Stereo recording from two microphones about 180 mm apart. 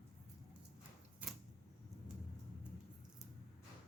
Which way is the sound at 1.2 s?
10° right (ahead or behind).